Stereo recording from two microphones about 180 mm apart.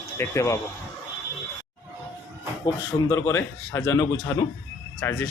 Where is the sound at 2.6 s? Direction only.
15° left (ahead or behind).